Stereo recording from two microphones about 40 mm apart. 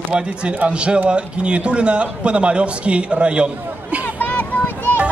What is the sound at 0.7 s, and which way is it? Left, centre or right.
A man's voice, right.